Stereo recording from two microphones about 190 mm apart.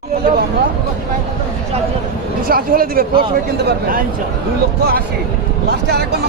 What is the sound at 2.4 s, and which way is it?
Speech, 50° right (ahead or behind).